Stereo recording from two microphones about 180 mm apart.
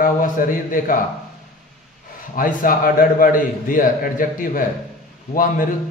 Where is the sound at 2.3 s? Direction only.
50° left (ahead or behind).